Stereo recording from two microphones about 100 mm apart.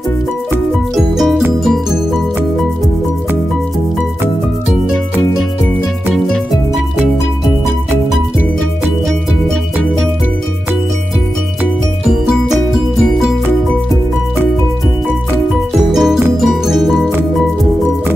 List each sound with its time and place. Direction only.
0.9 s music: centre (ahead or behind)
15.9 s music: 5° right (ahead or behind)